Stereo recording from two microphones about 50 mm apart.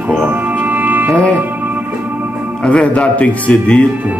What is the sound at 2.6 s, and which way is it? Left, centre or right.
Speech, left.